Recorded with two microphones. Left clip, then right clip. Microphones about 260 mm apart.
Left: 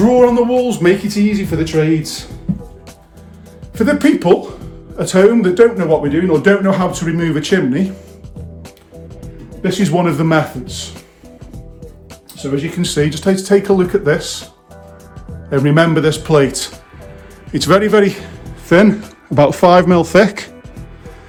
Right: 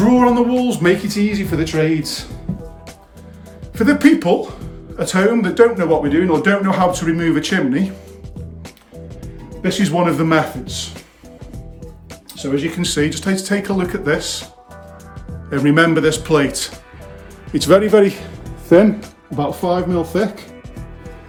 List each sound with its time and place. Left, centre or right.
0.1 s speech: centre
3.8 s speech: centre
9.2 s speech: centre
12.4 s speech: centre
15.6 s speech: centre
17.5 s speech: left
19.0 s speech: centre